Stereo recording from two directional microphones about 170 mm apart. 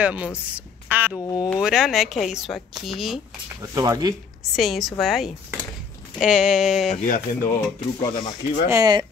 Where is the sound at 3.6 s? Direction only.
20° right (ahead or behind).